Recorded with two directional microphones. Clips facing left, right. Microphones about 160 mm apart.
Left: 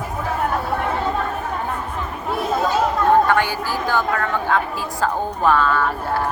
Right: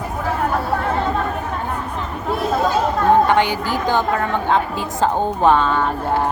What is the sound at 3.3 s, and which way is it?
A woman's voice, 20° right (ahead or behind).